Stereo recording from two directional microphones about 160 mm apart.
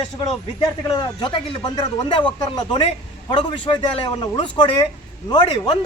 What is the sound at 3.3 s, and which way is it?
Speech, 35° left (ahead or behind).